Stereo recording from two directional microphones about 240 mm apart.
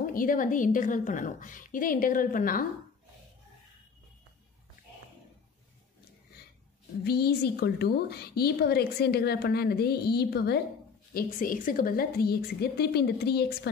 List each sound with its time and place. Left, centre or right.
0.0 s a woman's voice: left
7.1 s a woman's voice: left